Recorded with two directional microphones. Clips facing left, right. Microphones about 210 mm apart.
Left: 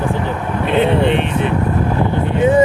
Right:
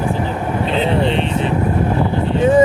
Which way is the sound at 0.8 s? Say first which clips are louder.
Left 3 dB; 60° left (ahead or behind).